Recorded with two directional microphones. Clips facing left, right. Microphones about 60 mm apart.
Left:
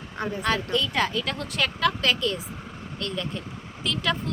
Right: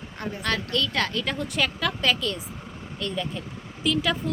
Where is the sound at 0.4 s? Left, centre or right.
Centre.